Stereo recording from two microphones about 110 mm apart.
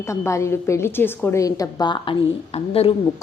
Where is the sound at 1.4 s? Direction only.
30° left (ahead or behind).